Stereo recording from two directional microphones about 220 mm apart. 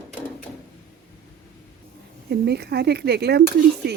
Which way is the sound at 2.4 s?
50° right (ahead or behind).